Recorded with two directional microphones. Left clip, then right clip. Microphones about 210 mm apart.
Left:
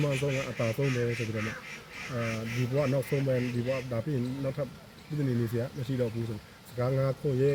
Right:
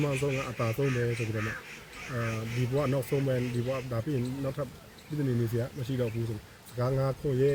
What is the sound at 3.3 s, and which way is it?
Speech, 15° right (ahead or behind).